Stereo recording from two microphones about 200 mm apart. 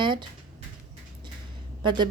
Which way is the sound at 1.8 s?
20° right (ahead or behind).